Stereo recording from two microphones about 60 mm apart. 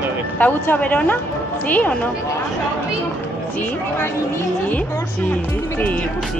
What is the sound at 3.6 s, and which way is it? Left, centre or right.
Speech, left.